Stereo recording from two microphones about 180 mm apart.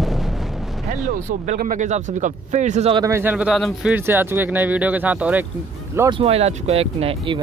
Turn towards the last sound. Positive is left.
turn(degrees=-30)  # may be behind; listen again after turning